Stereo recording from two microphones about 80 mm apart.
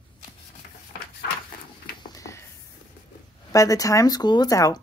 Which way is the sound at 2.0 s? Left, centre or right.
Left.